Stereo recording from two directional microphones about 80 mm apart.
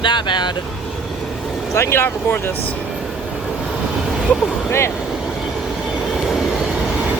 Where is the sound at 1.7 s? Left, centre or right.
Left.